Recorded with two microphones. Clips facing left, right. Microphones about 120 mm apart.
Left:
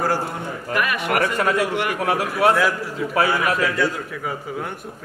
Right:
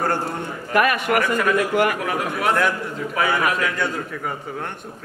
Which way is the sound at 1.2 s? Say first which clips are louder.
Even; 30° left (ahead or behind).